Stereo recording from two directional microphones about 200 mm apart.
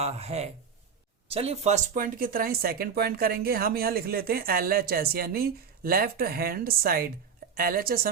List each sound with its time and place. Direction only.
0.0 s speech: 30° right (ahead or behind)